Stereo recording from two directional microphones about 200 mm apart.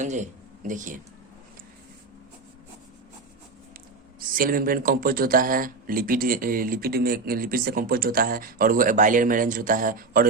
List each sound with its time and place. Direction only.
0.0 s speech: 35° right (ahead or behind)
4.2 s speech: 45° right (ahead or behind)